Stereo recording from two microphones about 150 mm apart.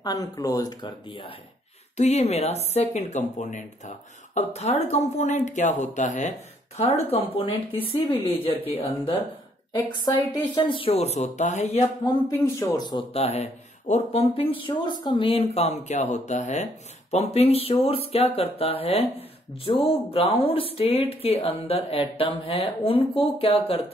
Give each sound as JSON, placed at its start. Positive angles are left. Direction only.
{"t": 0.0, "sound": "speech", "side_deg": 25}
{"t": 2.0, "sound": "speech", "side_deg": 45}
{"t": 6.8, "sound": "speech", "side_deg": 40}
{"t": 11.8, "sound": "speech", "side_deg": 25}
{"t": 13.1, "sound": "speech", "side_deg": 45}